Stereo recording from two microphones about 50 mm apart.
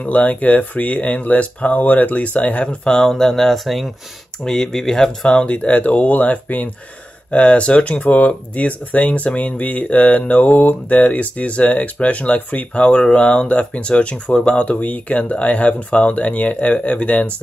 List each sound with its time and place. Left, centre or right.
0.0 s speech: left
3.1 s speech: centre; by 6.7 s left
7.2 s speech: left